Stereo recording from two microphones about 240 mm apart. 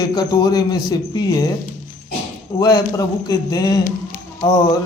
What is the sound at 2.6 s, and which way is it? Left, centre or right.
A man's voice, centre.